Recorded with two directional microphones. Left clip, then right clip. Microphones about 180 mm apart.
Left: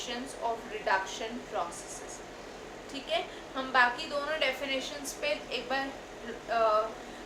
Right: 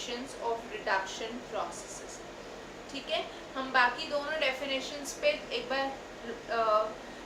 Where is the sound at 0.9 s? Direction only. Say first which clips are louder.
Left 2 dB; 25° left (ahead or behind).